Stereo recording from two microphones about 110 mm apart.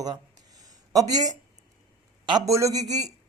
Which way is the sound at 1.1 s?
35° right (ahead or behind).